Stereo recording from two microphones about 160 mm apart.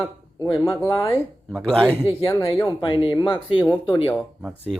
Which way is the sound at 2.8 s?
30° left (ahead or behind).